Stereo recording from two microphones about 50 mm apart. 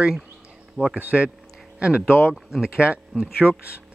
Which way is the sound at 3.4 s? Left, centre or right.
Right.